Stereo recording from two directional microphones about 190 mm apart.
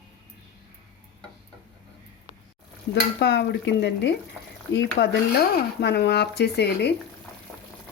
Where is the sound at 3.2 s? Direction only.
60° left (ahead or behind).